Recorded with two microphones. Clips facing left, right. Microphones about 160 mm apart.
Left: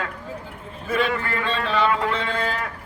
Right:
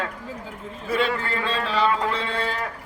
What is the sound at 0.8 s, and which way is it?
Speech, 30° right (ahead or behind).